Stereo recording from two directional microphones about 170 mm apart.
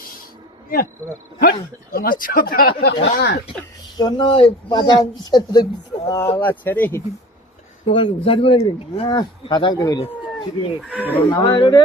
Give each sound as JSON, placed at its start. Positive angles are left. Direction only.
{"t": 1.4, "sound": "speech", "side_deg": 60}
{"t": 2.8, "sound": "speech", "side_deg": 80}
{"t": 3.9, "sound": "speech", "side_deg": 25}
{"t": 7.9, "sound": "speech", "side_deg": 30}
{"t": 10.8, "sound": "speech", "side_deg": -5}
{"t": 11.1, "sound": "speech", "side_deg": 20}